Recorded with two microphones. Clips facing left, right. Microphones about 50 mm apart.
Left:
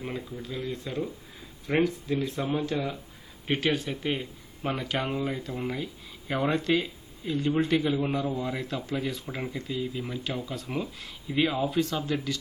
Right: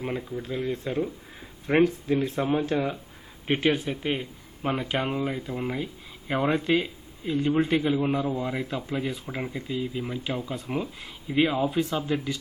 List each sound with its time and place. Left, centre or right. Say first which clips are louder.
0.0 s speech: right 4 dB; centre
0.4 s speech: right 5 dB; right